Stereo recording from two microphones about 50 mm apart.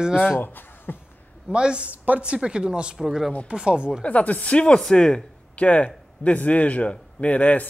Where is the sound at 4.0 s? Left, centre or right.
Left.